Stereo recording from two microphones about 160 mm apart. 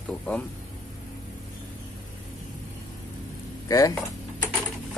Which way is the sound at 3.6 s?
20° left (ahead or behind).